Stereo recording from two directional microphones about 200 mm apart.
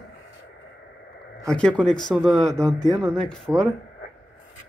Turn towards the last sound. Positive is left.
turn(degrees=5)  # may be behind; listen again after turning